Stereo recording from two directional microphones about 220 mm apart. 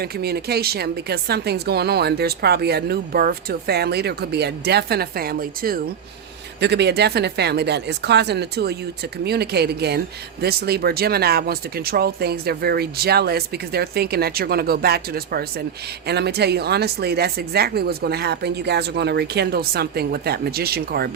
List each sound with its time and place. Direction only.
0.0 s speech: 45° right (ahead or behind)